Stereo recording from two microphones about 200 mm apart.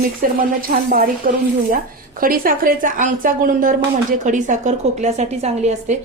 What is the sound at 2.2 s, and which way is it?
A woman's voice, 45° right (ahead or behind).